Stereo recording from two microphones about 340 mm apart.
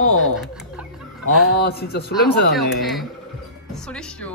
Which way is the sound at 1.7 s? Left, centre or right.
Left.